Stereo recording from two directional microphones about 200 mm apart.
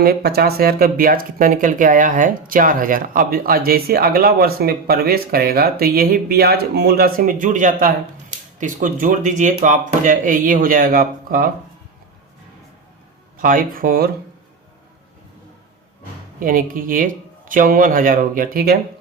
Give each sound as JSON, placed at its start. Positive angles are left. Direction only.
{"t": 0.0, "sound": "speech", "side_deg": -55}
{"t": 13.4, "sound": "speech", "side_deg": -45}
{"t": 16.4, "sound": "speech", "side_deg": -45}